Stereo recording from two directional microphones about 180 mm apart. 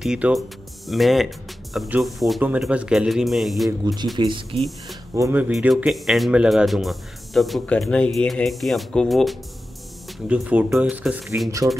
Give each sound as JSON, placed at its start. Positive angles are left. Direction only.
{"t": 0.0, "sound": "speech", "side_deg": -5}
{"t": 3.8, "sound": "speech", "side_deg": -25}
{"t": 5.1, "sound": "speech", "side_deg": -15}